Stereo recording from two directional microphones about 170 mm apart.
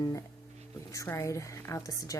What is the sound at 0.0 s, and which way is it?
Speech, 20° left (ahead or behind).